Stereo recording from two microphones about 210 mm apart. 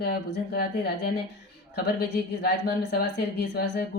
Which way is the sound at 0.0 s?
50° left (ahead or behind).